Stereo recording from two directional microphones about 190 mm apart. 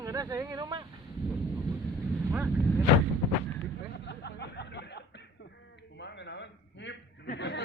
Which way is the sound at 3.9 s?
60° left (ahead or behind).